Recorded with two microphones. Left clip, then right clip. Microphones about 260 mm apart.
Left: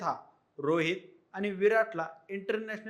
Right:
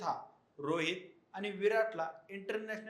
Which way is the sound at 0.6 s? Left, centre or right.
Left.